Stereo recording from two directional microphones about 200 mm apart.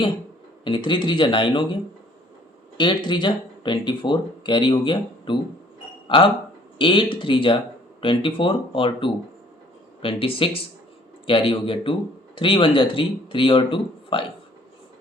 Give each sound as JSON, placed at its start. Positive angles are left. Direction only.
{"t": 0.6, "sound": "speech", "side_deg": 25}
{"t": 2.7, "sound": "speech", "side_deg": 20}